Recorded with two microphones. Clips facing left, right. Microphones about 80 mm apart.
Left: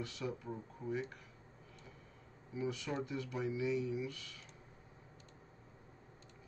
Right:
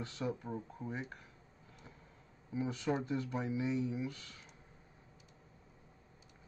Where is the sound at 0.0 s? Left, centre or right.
Right.